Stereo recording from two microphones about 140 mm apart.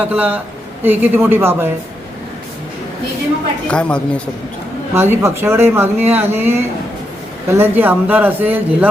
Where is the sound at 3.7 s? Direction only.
5° left (ahead or behind).